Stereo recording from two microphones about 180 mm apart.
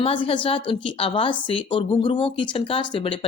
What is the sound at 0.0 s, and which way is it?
A woman's voice, 30° left (ahead or behind).